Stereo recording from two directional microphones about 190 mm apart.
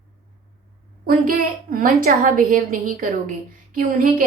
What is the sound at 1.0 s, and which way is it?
A woman's voice, 50° right (ahead or behind).